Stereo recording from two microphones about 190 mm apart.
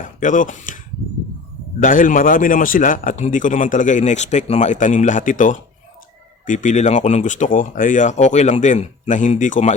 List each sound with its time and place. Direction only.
0.0 s speech: 45° left (ahead or behind)
1.8 s a man's voice: 45° left (ahead or behind)